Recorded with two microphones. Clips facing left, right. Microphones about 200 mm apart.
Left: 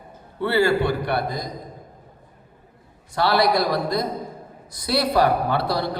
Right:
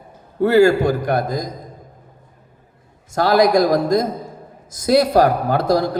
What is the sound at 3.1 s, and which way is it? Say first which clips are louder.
A man's voice: right 5 dB; 45° right (ahead or behind).